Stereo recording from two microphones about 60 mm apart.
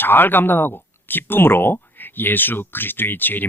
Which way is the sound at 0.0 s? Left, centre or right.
Left.